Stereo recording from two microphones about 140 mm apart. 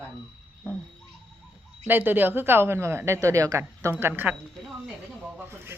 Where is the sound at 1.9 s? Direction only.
15° right (ahead or behind).